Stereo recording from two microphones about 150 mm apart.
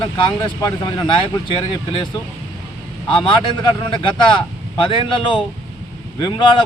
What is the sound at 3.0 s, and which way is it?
Speech, 30° left (ahead or behind).